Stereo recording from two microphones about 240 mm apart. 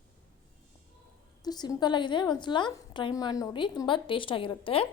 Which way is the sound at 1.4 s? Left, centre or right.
Centre.